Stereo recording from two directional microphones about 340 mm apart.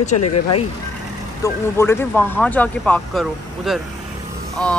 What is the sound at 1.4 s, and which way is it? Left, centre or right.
Speech, centre.